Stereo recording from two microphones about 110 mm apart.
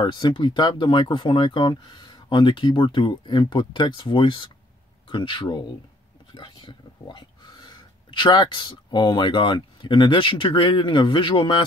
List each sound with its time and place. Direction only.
0.0 s speech: 45° left (ahead or behind)